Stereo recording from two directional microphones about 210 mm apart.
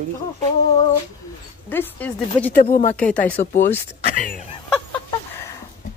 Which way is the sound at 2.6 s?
40° left (ahead or behind).